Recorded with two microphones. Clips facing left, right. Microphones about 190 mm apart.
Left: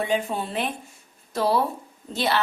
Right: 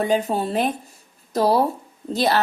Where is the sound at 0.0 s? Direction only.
40° right (ahead or behind).